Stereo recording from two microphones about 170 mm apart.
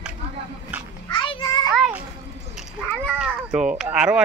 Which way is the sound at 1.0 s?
30° left (ahead or behind).